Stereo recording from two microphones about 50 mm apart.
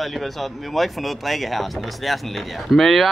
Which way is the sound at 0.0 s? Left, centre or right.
Centre.